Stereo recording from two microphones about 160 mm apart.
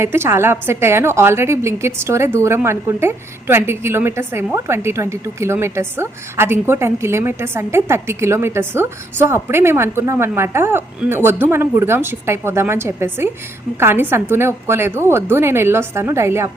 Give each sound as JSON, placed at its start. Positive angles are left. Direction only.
{"t": 0.0, "sound": "a woman's voice", "side_deg": -15}